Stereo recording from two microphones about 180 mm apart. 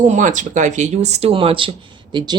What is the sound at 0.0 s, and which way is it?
Speech, 45° right (ahead or behind).